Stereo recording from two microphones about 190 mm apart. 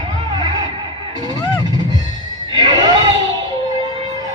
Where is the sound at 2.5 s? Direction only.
25° right (ahead or behind).